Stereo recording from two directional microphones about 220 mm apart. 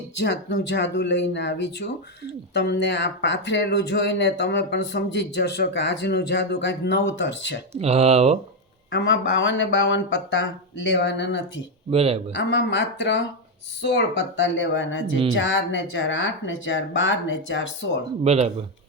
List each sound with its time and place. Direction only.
0.2 s speech: 55° left (ahead or behind)
7.7 s speech: 30° right (ahead or behind)
8.9 s speech: 55° left (ahead or behind)
11.9 s speech: 25° right (ahead or behind)
12.3 s speech: 55° left (ahead or behind)
18.2 s speech: 30° right (ahead or behind)